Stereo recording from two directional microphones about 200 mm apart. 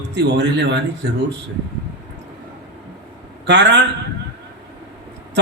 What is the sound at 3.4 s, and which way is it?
Speech, 60° right (ahead or behind).